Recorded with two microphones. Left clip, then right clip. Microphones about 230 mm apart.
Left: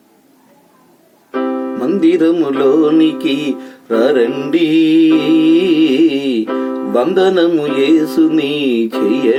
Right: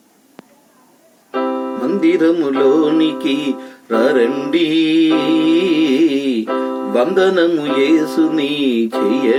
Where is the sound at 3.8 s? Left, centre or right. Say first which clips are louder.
Left 2 dB; centre.